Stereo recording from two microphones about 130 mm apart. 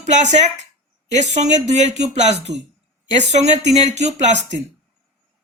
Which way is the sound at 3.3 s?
60° right (ahead or behind).